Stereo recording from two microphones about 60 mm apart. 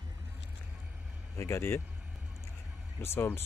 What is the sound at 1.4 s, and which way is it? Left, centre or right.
Speech, left.